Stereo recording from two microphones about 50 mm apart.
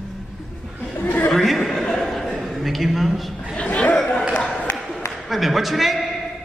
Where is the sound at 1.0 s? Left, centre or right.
Left.